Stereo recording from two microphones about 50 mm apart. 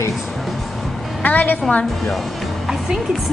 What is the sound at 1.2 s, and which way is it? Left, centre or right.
Speech, left.